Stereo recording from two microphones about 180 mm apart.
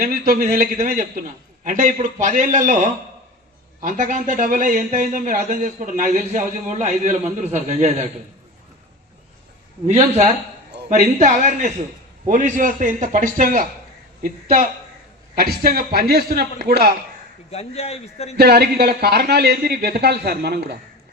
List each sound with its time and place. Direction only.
0.0 s speech: 55° right (ahead or behind)
9.8 s a man's voice: 40° right (ahead or behind); by 16.9 s 60° right (ahead or behind)
17.5 s a man's voice: 35° left (ahead or behind)
18.3 s speech: 60° right (ahead or behind)